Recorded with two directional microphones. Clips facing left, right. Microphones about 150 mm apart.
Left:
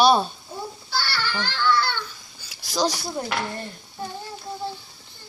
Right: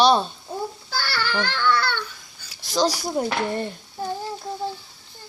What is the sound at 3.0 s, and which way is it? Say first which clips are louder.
Speech: right 4 dB; 20° right (ahead or behind).